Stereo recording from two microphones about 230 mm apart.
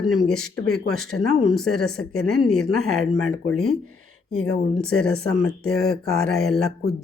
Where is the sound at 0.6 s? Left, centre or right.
Left.